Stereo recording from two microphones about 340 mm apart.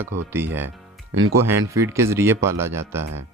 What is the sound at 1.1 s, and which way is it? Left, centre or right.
Speech, right.